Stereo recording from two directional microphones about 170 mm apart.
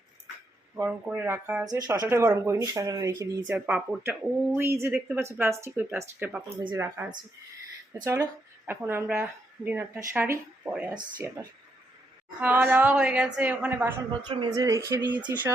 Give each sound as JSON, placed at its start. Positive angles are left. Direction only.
{"t": 0.8, "sound": "a woman's voice", "side_deg": -10}
{"t": 1.6, "sound": "a woman's voice", "side_deg": -20}
{"t": 3.4, "sound": "a woman's voice", "side_deg": -5}
{"t": 10.9, "sound": "speech", "side_deg": -25}
{"t": 12.4, "sound": "a woman's voice", "side_deg": -10}
{"t": 14.3, "sound": "speech", "side_deg": -25}